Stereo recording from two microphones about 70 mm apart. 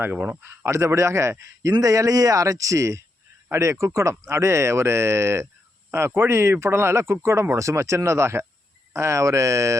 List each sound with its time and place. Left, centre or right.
0.0 s speech: right
0.4 s speech: right